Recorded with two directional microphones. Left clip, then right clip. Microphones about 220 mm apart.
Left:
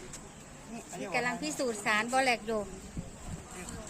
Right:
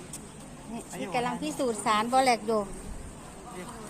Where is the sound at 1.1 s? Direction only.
10° left (ahead or behind).